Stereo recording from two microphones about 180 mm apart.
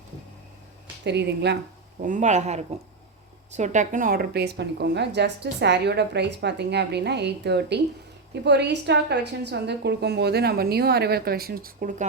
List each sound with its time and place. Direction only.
1.0 s a woman's voice: 70° right (ahead or behind)
2.0 s a woman's voice: 45° right (ahead or behind)